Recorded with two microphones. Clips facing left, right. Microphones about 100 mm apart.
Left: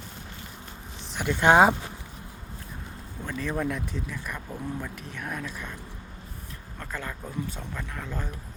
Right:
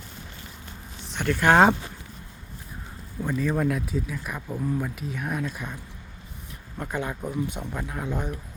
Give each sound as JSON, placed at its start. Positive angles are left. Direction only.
{"t": 1.0, "sound": "a sound", "side_deg": 5}
{"t": 1.3, "sound": "speech", "side_deg": 20}
{"t": 3.2, "sound": "speech", "side_deg": -5}
{"t": 6.9, "sound": "speech", "side_deg": -15}